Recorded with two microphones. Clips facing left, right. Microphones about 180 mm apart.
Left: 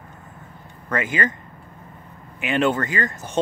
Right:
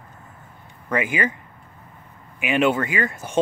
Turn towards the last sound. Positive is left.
turn(degrees=-10)  # may be behind; listen again after turning